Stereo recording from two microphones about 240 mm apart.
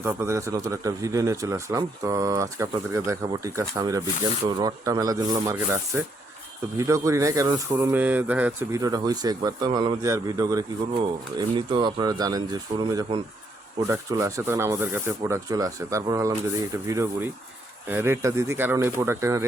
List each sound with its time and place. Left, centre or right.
0.0 s speech: centre